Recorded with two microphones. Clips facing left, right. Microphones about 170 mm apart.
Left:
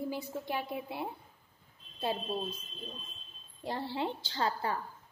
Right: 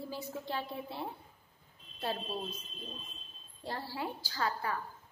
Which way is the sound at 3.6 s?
20° left (ahead or behind).